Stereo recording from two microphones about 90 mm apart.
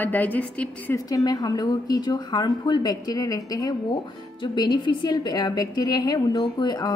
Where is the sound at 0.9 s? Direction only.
40° left (ahead or behind).